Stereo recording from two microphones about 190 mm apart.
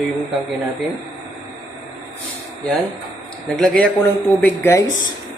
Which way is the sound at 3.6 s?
5° left (ahead or behind).